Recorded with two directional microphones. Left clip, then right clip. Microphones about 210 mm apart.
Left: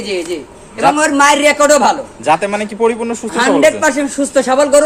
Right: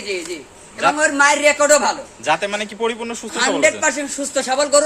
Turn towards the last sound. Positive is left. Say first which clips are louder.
# left 6 dB
turn(degrees=30)  # may be behind; listen again after turning